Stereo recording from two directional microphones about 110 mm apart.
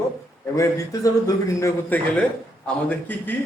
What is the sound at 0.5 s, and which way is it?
A man's voice, 30° left (ahead or behind).